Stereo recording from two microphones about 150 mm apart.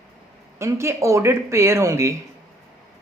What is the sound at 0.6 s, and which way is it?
Speech, 20° right (ahead or behind).